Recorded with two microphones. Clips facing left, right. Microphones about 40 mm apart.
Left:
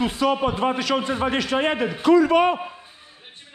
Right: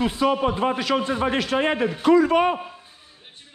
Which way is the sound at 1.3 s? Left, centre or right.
Left.